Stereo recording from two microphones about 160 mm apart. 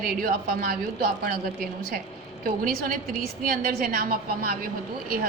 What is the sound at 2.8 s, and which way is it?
A woman's voice, 65° right (ahead or behind).